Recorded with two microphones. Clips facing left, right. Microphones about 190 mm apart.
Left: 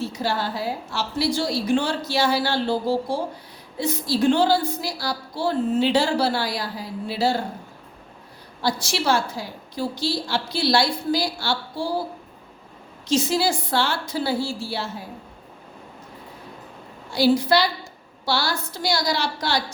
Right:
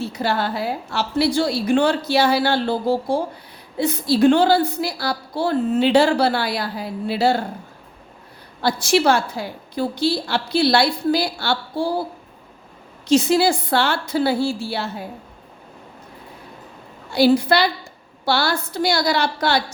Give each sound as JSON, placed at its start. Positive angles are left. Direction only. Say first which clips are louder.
{"t": 0.1, "sound": "a woman's voice", "louder": "right 3 dB", "side_deg": -60}
{"t": 8.6, "sound": "a woman's voice", "louder": "right 6 dB", "side_deg": -55}
{"t": 13.1, "sound": "a woman's voice", "louder": "right 5 dB", "side_deg": -60}
{"t": 17.1, "sound": "a woman's voice", "louder": "right 3 dB", "side_deg": -60}